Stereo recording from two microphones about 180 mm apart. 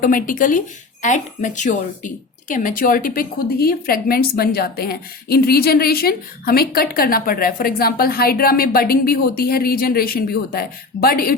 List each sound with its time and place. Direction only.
0.0 s a woman's voice: 50° left (ahead or behind)